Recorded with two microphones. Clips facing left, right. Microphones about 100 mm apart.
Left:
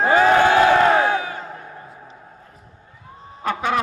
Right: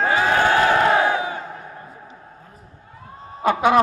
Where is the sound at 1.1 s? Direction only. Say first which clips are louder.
Even; 15° right (ahead or behind).